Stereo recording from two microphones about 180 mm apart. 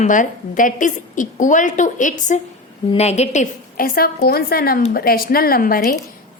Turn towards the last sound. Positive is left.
turn(degrees=50)  # may be behind; listen again after turning